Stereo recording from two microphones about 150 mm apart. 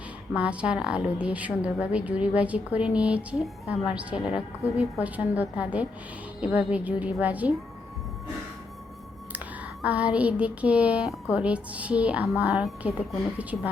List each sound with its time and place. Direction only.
0.3 s a woman's voice: 5° right (ahead or behind)
9.8 s a woman's voice: 10° right (ahead or behind)